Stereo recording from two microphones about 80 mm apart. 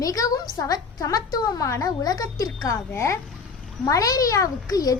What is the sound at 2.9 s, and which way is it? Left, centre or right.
Speech, left.